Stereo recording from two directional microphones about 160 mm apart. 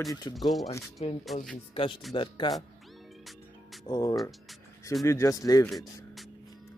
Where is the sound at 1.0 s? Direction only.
40° left (ahead or behind).